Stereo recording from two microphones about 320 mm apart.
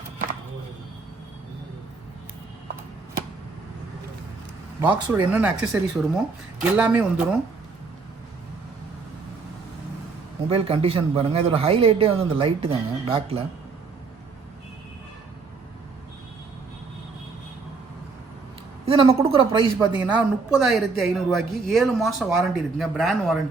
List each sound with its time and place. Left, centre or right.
4.8 s a woman's voice: centre
10.5 s a man's voice: centre
18.9 s a woman's voice: centre